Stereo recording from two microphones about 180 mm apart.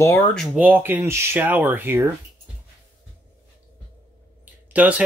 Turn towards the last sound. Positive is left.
turn(degrees=-10)  # may be behind; listen again after turning